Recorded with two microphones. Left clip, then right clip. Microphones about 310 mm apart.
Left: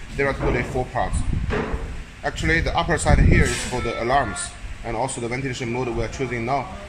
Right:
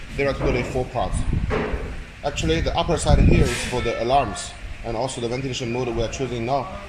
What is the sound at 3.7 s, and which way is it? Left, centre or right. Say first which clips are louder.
Speech: right 2 dB; left.